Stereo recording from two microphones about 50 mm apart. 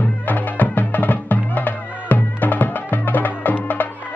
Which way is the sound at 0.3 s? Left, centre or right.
Left.